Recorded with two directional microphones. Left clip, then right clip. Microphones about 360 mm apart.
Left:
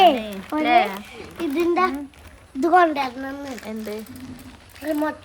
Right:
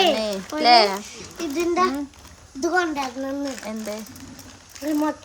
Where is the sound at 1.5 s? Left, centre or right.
Left.